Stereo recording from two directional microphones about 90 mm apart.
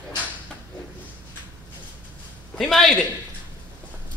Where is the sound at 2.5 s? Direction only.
5° left (ahead or behind).